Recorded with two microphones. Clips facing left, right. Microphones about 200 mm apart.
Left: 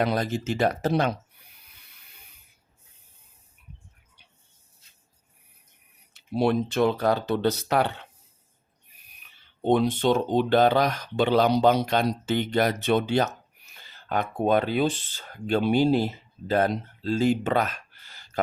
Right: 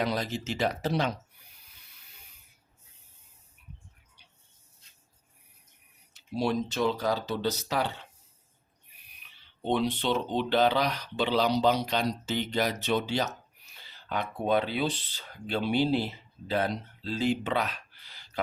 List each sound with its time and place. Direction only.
0.0 s speech: 50° left (ahead or behind)
6.1 s speech: 60° left (ahead or behind)
9.0 s speech: 45° left (ahead or behind)